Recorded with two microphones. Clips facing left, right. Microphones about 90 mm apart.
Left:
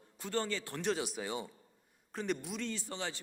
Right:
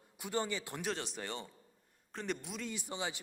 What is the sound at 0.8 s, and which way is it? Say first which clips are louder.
A man's voice: left 4 dB; 5° left (ahead or behind).